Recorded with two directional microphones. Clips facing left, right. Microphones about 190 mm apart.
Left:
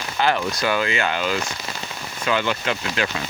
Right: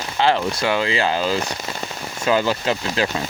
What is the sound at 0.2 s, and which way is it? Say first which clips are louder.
Speech: right 2 dB; 25° right (ahead or behind).